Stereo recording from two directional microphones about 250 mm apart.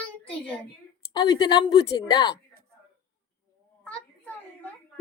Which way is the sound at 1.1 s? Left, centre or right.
Centre.